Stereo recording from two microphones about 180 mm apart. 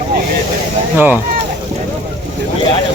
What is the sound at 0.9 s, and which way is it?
Speech, 10° right (ahead or behind).